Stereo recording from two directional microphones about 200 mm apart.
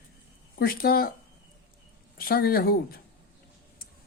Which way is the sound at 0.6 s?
45° left (ahead or behind).